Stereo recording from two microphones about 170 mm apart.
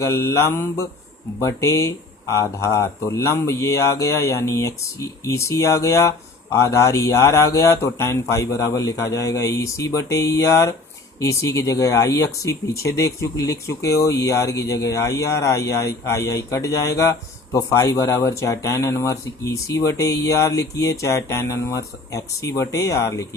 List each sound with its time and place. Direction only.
0.0 s speech: 15° left (ahead or behind)